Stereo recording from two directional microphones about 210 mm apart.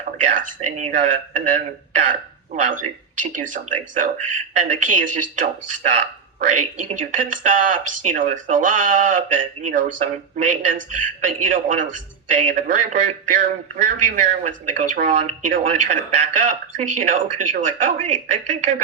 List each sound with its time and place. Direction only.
0.2 s speech: 40° right (ahead or behind)